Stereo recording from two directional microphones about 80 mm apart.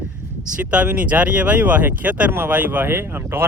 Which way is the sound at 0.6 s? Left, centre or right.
Centre.